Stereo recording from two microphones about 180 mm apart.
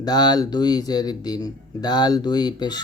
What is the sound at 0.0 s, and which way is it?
Speech, 25° left (ahead or behind).